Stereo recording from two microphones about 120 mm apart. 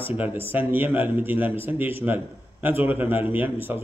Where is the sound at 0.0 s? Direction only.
15° right (ahead or behind).